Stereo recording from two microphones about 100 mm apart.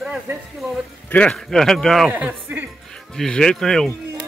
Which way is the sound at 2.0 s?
15° right (ahead or behind).